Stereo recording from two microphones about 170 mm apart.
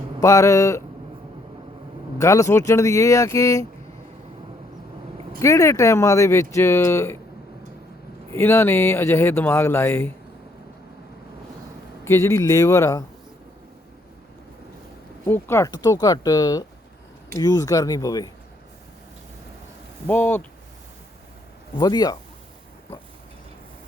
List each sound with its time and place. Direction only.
0.2 s speech: 20° left (ahead or behind)
2.1 s speech: 20° left (ahead or behind)
5.4 s speech: 15° left (ahead or behind)
8.3 s speech: 15° left (ahead or behind)
12.0 s speech: 15° left (ahead or behind)
15.3 s speech: 15° left (ahead or behind)
20.1 s speech: 10° left (ahead or behind)
21.8 s speech: 25° left (ahead or behind)